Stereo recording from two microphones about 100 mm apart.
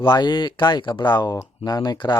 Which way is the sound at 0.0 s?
50° left (ahead or behind).